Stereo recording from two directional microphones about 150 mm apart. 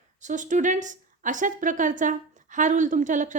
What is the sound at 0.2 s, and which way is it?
A woman's voice, 55° right (ahead or behind).